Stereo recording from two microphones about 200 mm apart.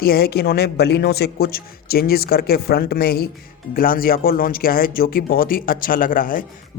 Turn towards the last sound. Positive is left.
turn(degrees=45)  # may be behind; listen again after turning